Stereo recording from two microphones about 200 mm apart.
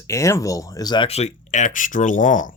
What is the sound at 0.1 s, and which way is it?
Speech, 15° left (ahead or behind).